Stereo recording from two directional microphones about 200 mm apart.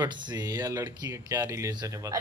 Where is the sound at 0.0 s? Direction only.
20° right (ahead or behind).